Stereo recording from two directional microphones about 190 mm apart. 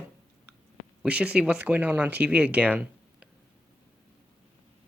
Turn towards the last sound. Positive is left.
turn(degrees=-5)  # may be behind; listen again after turning